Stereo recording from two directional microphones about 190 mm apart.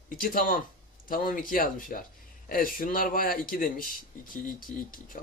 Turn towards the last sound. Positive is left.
turn(degrees=45)  # may be behind; listen again after turning